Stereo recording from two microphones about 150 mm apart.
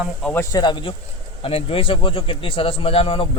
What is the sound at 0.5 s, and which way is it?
Speech, 30° left (ahead or behind).